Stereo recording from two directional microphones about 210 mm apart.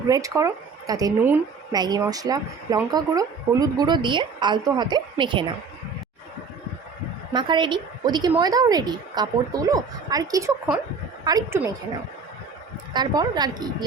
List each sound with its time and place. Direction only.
0.1 s speech: 15° right (ahead or behind)
7.3 s speech: 20° right (ahead or behind)
12.9 s speech: 20° right (ahead or behind)